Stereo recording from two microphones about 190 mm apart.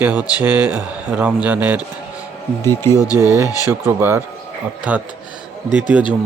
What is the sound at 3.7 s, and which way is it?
Speech, 10° right (ahead or behind).